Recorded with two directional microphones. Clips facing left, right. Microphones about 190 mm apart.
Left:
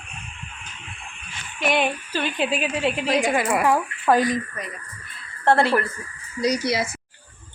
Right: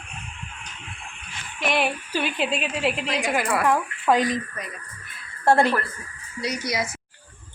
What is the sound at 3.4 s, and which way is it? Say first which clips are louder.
Speech: left 2 dB; 15° left (ahead or behind).